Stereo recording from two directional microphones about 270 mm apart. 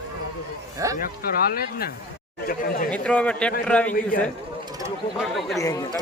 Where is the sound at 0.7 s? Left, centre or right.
Centre.